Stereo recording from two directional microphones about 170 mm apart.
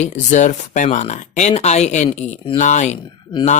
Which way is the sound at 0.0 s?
45° left (ahead or behind).